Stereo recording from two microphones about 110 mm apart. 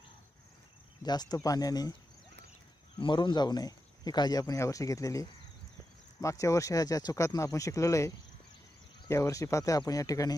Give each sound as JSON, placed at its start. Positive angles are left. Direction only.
{"t": 1.0, "sound": "speech", "side_deg": 40}
{"t": 3.0, "sound": "speech", "side_deg": 45}
{"t": 6.2, "sound": "speech", "side_deg": 30}
{"t": 9.1, "sound": "speech", "side_deg": 30}